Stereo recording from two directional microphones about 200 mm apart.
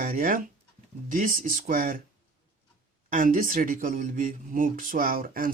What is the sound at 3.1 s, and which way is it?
Speech, 40° right (ahead or behind).